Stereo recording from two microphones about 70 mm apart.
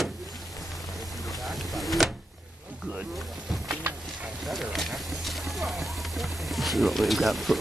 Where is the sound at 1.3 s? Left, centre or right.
Centre.